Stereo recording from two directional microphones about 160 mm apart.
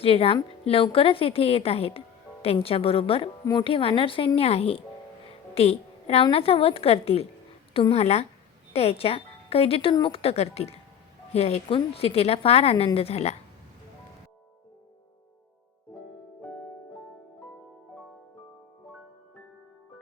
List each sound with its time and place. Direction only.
0.0 s a woman's voice: 35° left (ahead or behind)
16.4 s music: 10° left (ahead or behind)